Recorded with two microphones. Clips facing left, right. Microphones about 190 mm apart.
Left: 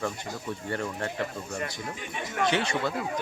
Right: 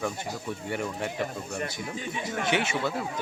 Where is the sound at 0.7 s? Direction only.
10° right (ahead or behind).